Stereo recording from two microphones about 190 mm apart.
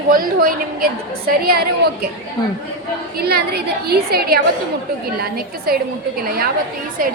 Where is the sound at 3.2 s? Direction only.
55° right (ahead or behind).